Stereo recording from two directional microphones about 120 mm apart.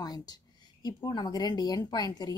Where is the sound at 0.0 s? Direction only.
30° left (ahead or behind).